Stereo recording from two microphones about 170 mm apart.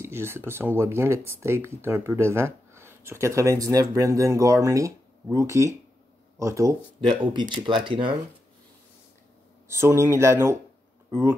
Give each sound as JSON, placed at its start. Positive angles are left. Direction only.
{"t": 0.0, "sound": "a sound", "side_deg": -15}
{"t": 0.5, "sound": "speech", "side_deg": -15}
{"t": 9.7, "sound": "speech", "side_deg": -15}